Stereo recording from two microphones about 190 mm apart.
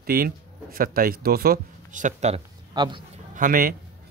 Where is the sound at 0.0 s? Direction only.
50° right (ahead or behind).